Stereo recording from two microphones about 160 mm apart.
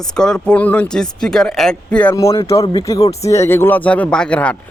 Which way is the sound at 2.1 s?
20° left (ahead or behind).